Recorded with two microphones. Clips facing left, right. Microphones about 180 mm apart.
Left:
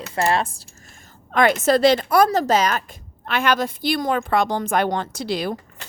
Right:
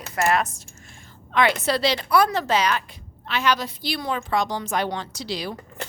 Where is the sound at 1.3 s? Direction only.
45° left (ahead or behind).